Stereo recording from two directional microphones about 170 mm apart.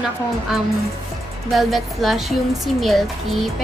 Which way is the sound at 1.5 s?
Centre (ahead or behind).